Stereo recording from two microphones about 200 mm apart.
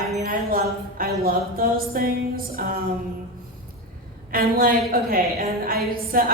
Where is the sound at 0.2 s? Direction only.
45° right (ahead or behind).